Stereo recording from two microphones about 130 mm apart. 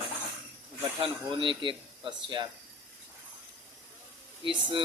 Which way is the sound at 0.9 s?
40° right (ahead or behind).